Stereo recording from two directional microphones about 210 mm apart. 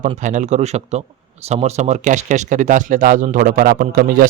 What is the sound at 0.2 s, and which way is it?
Speech, 35° right (ahead or behind).